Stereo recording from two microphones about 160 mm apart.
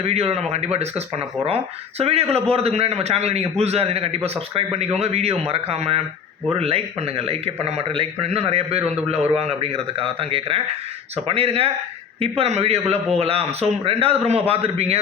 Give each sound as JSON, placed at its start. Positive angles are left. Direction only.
{"t": 0.0, "sound": "a man's voice", "side_deg": -40}